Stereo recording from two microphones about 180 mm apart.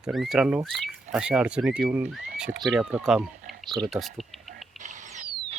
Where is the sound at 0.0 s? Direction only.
Centre (ahead or behind).